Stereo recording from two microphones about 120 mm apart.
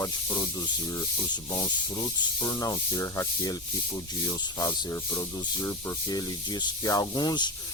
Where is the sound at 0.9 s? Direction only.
30° left (ahead or behind).